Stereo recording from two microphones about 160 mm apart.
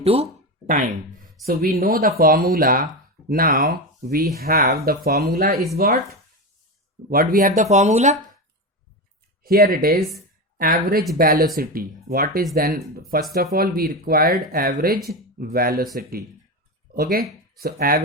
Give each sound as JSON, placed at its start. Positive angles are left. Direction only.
{"t": 0.0, "sound": "speech", "side_deg": -40}
{"t": 0.7, "sound": "speech", "side_deg": -55}
{"t": 1.5, "sound": "speech", "side_deg": -65}
{"t": 7.1, "sound": "speech", "side_deg": -65}
{"t": 9.4, "sound": "speech", "side_deg": -70}